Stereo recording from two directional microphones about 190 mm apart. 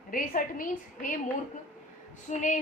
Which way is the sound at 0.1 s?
45° left (ahead or behind).